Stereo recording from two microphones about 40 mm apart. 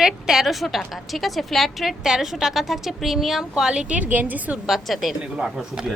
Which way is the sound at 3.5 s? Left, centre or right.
Centre.